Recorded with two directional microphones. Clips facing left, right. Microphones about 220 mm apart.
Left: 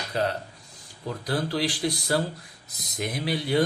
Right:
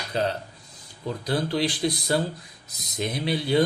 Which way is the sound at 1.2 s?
20° right (ahead or behind).